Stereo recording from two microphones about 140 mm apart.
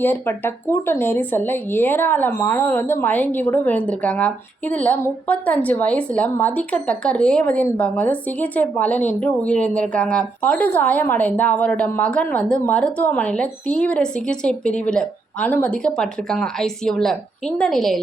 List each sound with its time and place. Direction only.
0.0 s a woman's voice: 15° left (ahead or behind)